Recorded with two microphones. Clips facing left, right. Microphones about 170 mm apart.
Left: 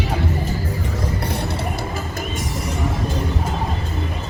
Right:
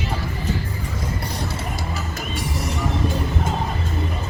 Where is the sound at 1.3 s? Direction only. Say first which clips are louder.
Left 4 dB; 60° left (ahead or behind).